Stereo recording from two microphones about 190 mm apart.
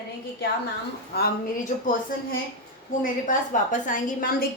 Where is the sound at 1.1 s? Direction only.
55° left (ahead or behind).